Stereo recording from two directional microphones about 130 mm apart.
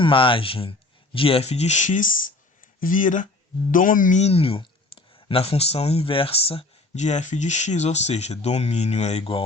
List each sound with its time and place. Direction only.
0.0 s speech: 40° left (ahead or behind); by 4.2 s 90° left
4.2 s speech: 50° left (ahead or behind)